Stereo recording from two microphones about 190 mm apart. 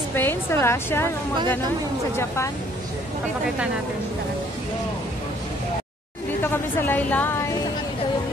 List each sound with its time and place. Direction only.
0.1 s a woman's voice: 10° left (ahead or behind)
2.1 s speech: 15° left (ahead or behind)
6.4 s speech: 10° left (ahead or behind)